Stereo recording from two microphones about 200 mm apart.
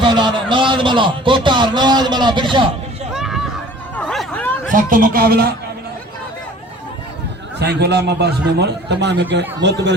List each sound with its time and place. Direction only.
0.0 s a man's voice: 20° right (ahead or behind)
3.1 s run: centre (ahead or behind)
3.9 s a sound: 5° left (ahead or behind)
4.7 s speech: 45° right (ahead or behind)
7.6 s a man's voice: 55° right (ahead or behind)